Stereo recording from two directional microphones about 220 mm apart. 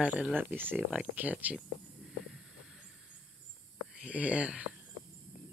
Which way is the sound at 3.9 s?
5° right (ahead or behind).